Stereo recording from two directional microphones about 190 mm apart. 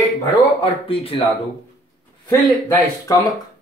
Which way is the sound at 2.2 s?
15° left (ahead or behind).